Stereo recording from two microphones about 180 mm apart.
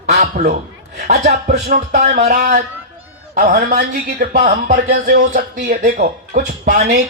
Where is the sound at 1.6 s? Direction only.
50° right (ahead or behind).